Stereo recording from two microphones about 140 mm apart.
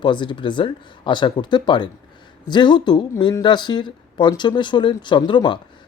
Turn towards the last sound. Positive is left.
turn(degrees=35)  # may be behind; listen again after turning